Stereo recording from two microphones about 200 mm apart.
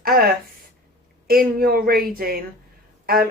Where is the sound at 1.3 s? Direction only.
50° right (ahead or behind).